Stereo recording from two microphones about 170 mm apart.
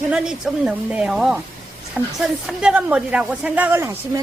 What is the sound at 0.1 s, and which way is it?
A woman's voice, 5° right (ahead or behind).